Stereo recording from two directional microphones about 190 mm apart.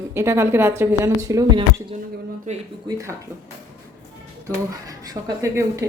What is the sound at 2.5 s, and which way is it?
Speech, 40° right (ahead or behind).